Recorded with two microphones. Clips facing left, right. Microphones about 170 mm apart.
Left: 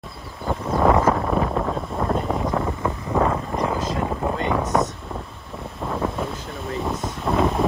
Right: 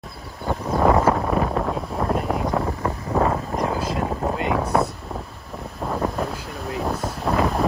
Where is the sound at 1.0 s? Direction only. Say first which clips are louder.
Even; 5° right (ahead or behind).